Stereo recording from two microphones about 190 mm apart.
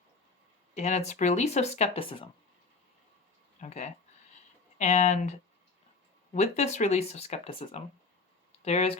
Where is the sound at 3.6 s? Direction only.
35° left (ahead or behind).